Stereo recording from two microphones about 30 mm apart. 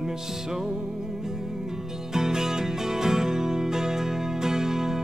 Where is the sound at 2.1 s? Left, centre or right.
Centre.